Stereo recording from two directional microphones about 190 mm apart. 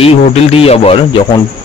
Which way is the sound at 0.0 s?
30° left (ahead or behind).